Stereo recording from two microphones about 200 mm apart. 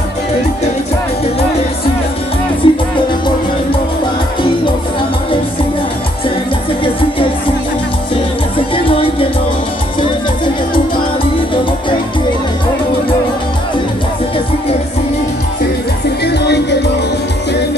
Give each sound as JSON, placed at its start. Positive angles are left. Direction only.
{"t": 2.6, "sound": "music", "side_deg": 25}
{"t": 6.8, "sound": "music", "side_deg": 25}
{"t": 8.5, "sound": "music", "side_deg": 25}